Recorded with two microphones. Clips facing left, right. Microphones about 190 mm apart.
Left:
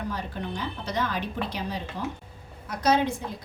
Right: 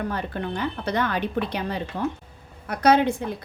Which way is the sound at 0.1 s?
60° right (ahead or behind).